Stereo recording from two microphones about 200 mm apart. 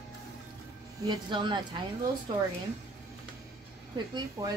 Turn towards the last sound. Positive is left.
turn(degrees=-15)  # may be behind; listen again after turning